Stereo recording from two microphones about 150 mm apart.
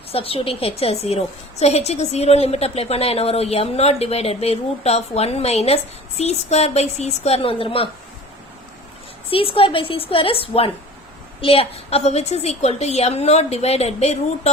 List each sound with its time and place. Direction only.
0.1 s a woman's voice: 40° left (ahead or behind)
9.3 s a woman's voice: 35° left (ahead or behind)